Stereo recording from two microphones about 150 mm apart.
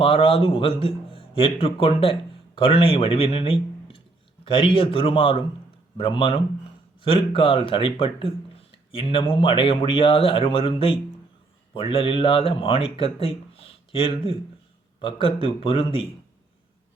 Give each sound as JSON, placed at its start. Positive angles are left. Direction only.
{"t": 0.0, "sound": "a man's voice", "side_deg": 35}